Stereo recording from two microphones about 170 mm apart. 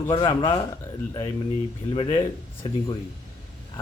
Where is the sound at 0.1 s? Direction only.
25° left (ahead or behind).